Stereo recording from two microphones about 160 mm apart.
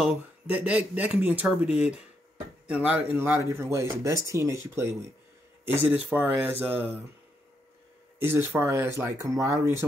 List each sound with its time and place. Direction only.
0.0 s speech: 5° right (ahead or behind)
8.2 s speech: 15° right (ahead or behind)